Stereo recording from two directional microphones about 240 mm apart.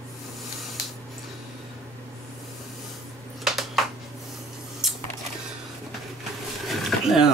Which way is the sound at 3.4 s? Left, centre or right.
Centre.